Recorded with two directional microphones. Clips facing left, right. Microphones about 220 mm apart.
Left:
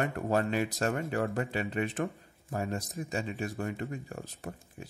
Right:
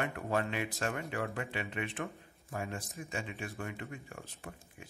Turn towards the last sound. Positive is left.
turn(degrees=40)  # may be behind; listen again after turning